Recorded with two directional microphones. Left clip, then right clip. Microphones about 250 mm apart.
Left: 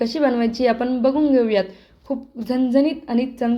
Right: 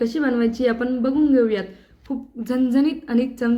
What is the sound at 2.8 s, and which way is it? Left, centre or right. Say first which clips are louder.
Speech: even; right.